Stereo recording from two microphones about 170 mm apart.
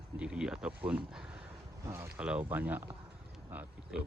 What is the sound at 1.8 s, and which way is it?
Speech, 15° right (ahead or behind).